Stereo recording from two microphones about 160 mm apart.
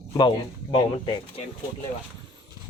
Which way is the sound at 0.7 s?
35° left (ahead or behind).